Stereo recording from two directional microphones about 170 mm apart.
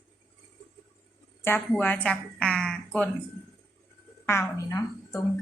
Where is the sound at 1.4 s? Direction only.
10° left (ahead or behind).